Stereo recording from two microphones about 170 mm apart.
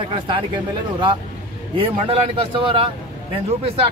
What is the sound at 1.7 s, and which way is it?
Speech, 30° right (ahead or behind).